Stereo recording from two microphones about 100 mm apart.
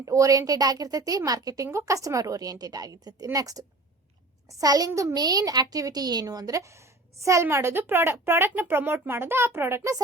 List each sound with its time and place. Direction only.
0.0 s a woman's voice: 35° right (ahead or behind)
4.6 s a woman's voice: 40° right (ahead or behind)
5.1 s a woman's voice: 40° right (ahead or behind)